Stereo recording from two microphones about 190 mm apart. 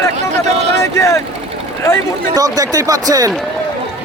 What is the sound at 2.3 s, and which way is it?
Speech, 20° right (ahead or behind).